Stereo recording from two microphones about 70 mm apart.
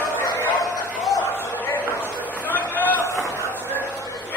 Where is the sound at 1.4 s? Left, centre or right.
Left.